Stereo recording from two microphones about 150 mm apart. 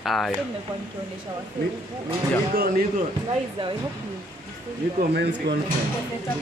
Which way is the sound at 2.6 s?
85° right.